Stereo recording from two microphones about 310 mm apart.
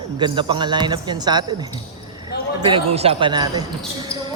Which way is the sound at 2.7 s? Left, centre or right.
Centre.